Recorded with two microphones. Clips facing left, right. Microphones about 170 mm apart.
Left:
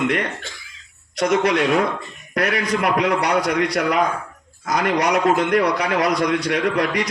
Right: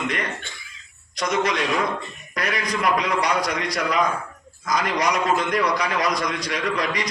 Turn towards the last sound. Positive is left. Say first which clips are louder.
# left 5 dB
turn(degrees=60)  # may be behind; listen again after turning